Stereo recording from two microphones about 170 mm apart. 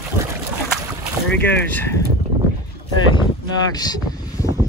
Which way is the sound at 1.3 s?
10° left (ahead or behind).